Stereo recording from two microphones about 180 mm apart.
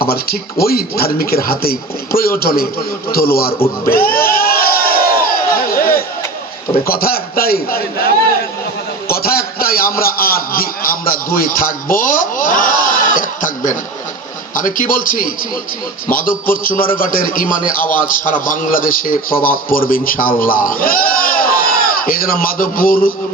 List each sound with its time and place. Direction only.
0.0 s a man's voice: 55° left (ahead or behind)
3.8 s crowd: 55° left (ahead or behind)
6.8 s a man's voice: 55° left (ahead or behind)
9.0 s a sound: 55° left (ahead or behind)
14.6 s a man's voice: 50° left (ahead or behind)
16.5 s a man's voice: 50° left (ahead or behind)